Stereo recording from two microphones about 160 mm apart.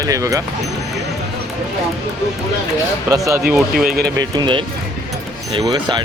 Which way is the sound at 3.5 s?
Centre (ahead or behind).